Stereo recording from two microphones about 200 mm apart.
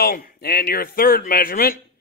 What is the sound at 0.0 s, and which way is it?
A man's voice, 45° left (ahead or behind).